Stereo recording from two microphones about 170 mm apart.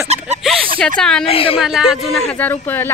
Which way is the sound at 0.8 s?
5° left (ahead or behind).